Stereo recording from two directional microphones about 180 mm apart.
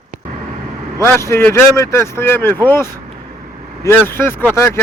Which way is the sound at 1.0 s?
15° left (ahead or behind).